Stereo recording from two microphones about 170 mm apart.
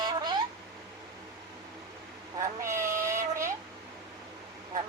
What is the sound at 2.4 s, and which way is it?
Speech, 15° right (ahead or behind).